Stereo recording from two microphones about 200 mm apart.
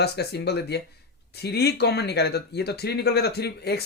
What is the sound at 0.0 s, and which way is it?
Speech, 55° left (ahead or behind).